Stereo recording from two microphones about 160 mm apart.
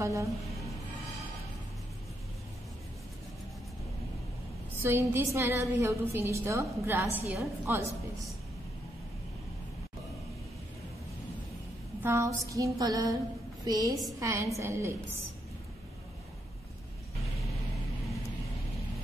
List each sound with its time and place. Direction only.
0.0 s speech: 20° right (ahead or behind)
4.8 s a woman's voice: 15° right (ahead or behind)
12.0 s female singing: 20° right (ahead or behind)
14.2 s a woman's voice: 20° right (ahead or behind)